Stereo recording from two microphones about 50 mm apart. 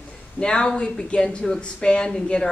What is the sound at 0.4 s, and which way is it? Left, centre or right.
Speech, centre.